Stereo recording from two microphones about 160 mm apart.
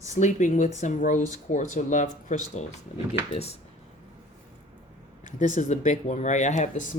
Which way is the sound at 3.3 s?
40° left (ahead or behind).